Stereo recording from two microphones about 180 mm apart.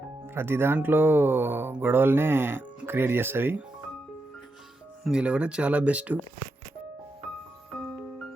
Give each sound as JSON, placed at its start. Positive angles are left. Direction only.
{"t": 0.3, "sound": "speech", "side_deg": -10}
{"t": 5.0, "sound": "speech", "side_deg": -5}